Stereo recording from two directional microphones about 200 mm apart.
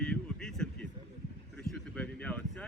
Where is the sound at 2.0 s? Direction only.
5° left (ahead or behind).